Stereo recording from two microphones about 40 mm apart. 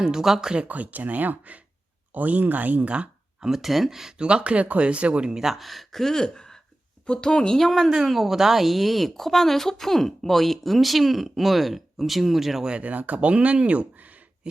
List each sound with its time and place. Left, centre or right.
0.0 s speech: centre
0.6 s speech: right
3.4 s speech: centre
4.2 s speech: right
5.3 s speech: centre
5.6 s speech: centre
7.6 s a woman's voice: centre
12.8 s speech: right